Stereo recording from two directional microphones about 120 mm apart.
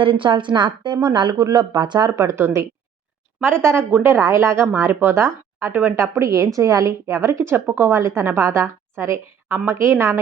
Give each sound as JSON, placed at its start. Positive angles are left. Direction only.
{"t": 0.0, "sound": "a woman's voice", "side_deg": -45}